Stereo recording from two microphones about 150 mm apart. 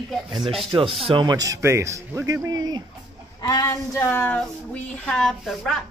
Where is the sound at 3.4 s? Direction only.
25° left (ahead or behind).